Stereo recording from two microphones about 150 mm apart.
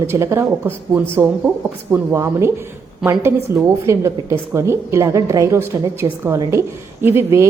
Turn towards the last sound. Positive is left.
turn(degrees=-15)  # may be behind; listen again after turning